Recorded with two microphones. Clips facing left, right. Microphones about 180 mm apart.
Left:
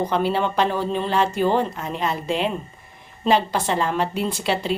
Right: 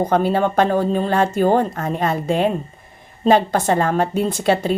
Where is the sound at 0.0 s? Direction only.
50° right (ahead or behind).